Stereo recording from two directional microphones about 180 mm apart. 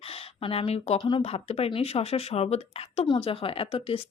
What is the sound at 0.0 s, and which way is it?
Speech, 30° left (ahead or behind).